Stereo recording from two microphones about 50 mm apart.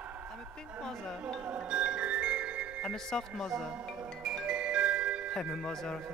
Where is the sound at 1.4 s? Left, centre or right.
Right.